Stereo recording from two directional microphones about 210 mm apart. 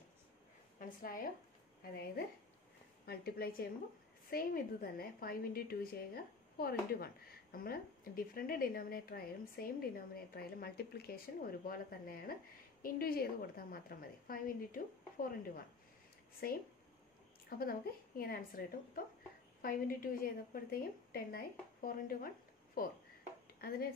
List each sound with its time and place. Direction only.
0.7 s a woman's voice: 40° left (ahead or behind)
16.4 s a woman's voice: 45° left (ahead or behind)
19.6 s a woman's voice: 45° left (ahead or behind)